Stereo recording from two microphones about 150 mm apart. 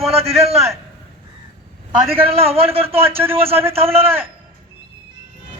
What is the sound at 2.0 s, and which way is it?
Speech, 15° right (ahead or behind).